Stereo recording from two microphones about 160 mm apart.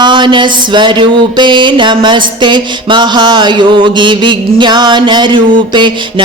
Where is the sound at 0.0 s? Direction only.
30° right (ahead or behind).